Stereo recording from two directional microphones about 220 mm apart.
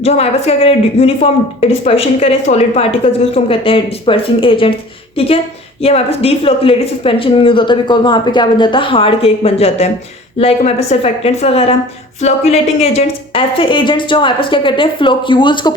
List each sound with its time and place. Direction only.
0.0 s speech: 30° left (ahead or behind)